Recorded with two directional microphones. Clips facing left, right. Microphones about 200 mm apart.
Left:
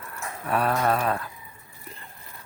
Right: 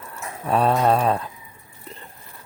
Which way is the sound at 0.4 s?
25° right (ahead or behind).